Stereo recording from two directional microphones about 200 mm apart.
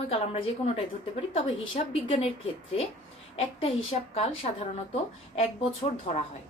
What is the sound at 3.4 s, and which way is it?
A woman's voice, 30° left (ahead or behind).